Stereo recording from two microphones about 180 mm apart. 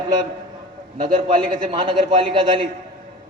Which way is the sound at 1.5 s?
25° right (ahead or behind).